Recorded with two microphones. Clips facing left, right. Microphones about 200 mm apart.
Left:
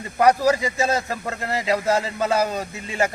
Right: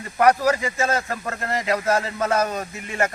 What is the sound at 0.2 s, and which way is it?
Speech, 15° left (ahead or behind).